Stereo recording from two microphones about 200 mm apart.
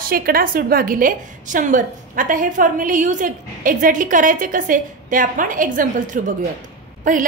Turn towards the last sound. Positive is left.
turn(degrees=-40)  # may be behind; listen again after turning